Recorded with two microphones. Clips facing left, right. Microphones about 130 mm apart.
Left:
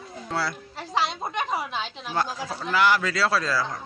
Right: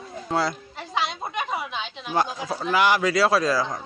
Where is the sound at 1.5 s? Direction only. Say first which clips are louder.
Left 1 dB; centre (ahead or behind).